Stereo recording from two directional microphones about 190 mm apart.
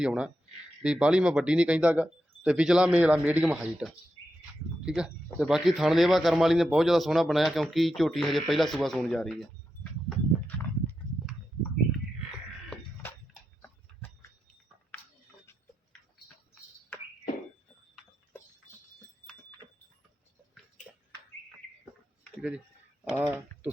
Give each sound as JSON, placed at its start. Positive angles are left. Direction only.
{"t": 0.0, "sound": "speech", "side_deg": -5}
{"t": 10.1, "sound": "horse", "side_deg": 10}
{"t": 12.7, "sound": "a sound", "side_deg": 10}
{"t": 13.6, "sound": "horse", "side_deg": 15}
{"t": 22.4, "sound": "speech", "side_deg": -5}